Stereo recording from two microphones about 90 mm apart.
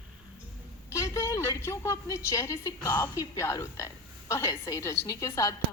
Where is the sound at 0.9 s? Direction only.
35° left (ahead or behind).